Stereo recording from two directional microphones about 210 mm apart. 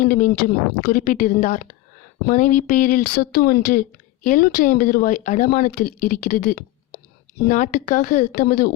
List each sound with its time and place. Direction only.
0.0 s a woman's voice: 40° left (ahead or behind)